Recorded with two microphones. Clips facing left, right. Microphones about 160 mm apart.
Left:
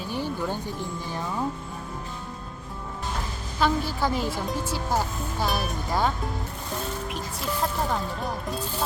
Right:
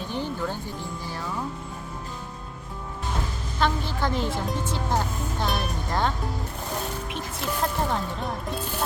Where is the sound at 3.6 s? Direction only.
5° left (ahead or behind).